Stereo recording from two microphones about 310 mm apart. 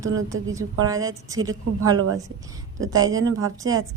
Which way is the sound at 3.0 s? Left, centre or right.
Right.